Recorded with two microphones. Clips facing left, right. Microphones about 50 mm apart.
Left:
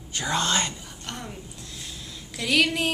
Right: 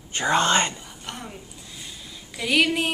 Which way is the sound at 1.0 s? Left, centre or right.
Centre.